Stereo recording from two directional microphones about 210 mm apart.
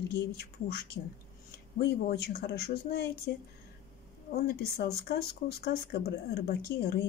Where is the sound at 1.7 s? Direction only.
50° left (ahead or behind).